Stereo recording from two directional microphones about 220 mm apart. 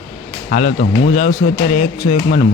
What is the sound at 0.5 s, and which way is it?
Speech, 30° left (ahead or behind).